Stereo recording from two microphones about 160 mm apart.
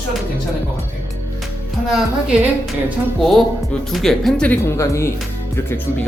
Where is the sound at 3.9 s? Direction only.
Centre (ahead or behind); by 5.1 s 20° left (ahead or behind).